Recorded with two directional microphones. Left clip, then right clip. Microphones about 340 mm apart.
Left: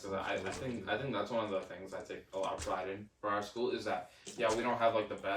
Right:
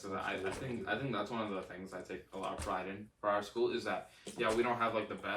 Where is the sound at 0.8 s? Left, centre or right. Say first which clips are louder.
Left 1 dB; centre.